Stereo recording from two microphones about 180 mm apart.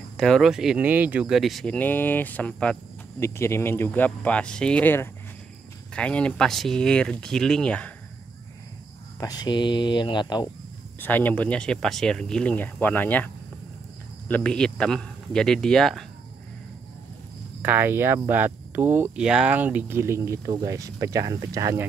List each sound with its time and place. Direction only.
0.2 s speech: centre (ahead or behind)
9.2 s speech: 20° left (ahead or behind)
11.0 s speech: 10° left (ahead or behind)
17.6 s speech: 10° right (ahead or behind)